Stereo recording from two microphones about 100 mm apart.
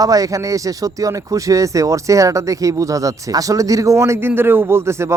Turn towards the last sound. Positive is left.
turn(degrees=-25)  # may be behind; listen again after turning